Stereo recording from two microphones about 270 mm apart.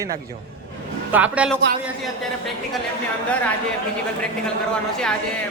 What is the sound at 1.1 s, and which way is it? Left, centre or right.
Speech, centre.